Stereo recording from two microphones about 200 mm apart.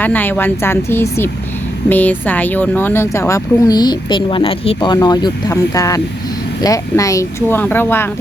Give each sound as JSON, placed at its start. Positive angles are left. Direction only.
{"t": 0.0, "sound": "speech", "side_deg": 10}